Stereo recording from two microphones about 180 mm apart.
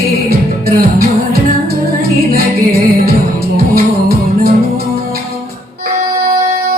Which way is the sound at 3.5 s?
55° right (ahead or behind).